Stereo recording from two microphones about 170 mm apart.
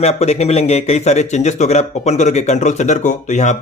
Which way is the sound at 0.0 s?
40° left (ahead or behind).